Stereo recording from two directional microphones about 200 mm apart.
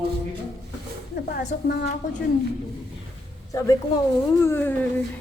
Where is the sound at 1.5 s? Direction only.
45° left (ahead or behind).